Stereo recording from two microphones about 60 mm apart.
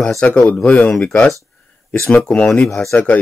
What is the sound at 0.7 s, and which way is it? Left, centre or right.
Speech, left.